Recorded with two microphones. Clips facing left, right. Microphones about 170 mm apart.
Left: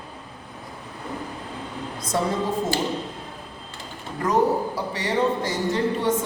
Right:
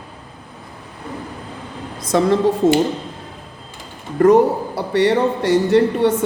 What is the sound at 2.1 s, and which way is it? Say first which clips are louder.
Speech: right 8 dB; 85° right.